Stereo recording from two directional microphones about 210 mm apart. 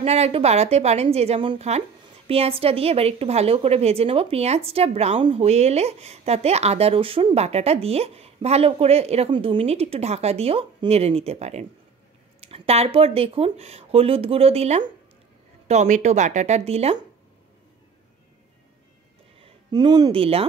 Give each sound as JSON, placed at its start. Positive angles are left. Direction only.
{"t": 0.0, "sound": "a woman's voice", "side_deg": -30}
{"t": 19.7, "sound": "a woman's voice", "side_deg": -20}